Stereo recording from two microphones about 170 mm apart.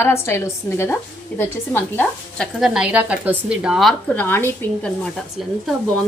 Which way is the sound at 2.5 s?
Centre (ahead or behind).